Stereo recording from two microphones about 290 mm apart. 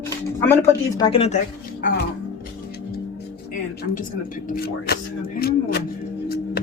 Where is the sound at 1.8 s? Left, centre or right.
Left.